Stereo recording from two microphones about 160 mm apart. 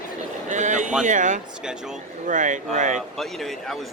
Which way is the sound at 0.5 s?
50° right (ahead or behind).